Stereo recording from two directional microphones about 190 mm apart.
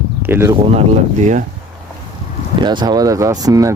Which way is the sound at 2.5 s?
25° right (ahead or behind).